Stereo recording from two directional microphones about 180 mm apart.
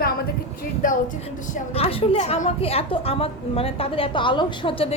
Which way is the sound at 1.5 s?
35° left (ahead or behind).